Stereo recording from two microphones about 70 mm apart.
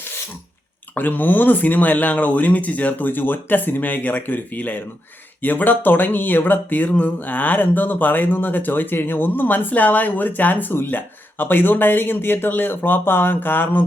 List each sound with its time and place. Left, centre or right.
0.9 s speech: left